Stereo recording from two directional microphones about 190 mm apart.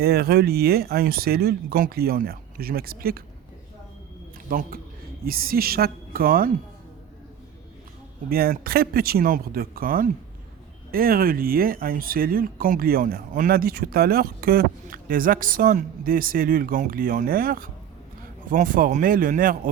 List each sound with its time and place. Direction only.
0.0 s speech: 55° right (ahead or behind)
4.4 s speech: 50° right (ahead or behind)
8.3 s speech: 50° right (ahead or behind)